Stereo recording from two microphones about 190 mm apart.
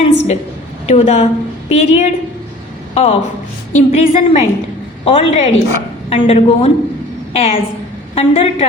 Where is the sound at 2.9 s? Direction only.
35° left (ahead or behind).